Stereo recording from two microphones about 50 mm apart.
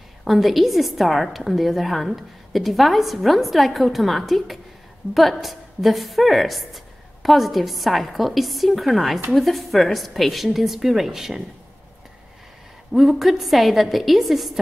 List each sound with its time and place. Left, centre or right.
0.2 s a woman's voice: centre
12.9 s a woman's voice: centre